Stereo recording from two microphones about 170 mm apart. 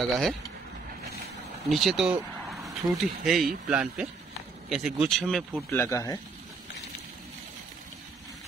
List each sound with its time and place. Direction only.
0.0 s speech: centre (ahead or behind)
1.7 s speech: centre (ahead or behind)
5.7 s speech: 15° left (ahead or behind)